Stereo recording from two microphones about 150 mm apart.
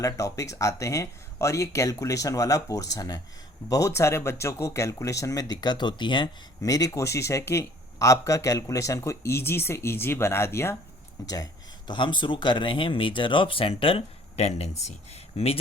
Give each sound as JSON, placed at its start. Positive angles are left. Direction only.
{"t": 0.0, "sound": "speech", "side_deg": 20}